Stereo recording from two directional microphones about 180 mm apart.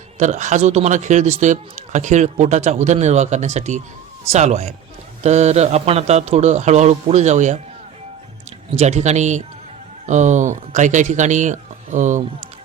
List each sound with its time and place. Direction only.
0.2 s speech: 40° right (ahead or behind)
8.7 s a man's voice: 40° right (ahead or behind)